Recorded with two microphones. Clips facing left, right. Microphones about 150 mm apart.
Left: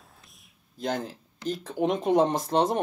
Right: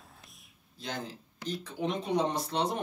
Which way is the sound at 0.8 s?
50° left (ahead or behind).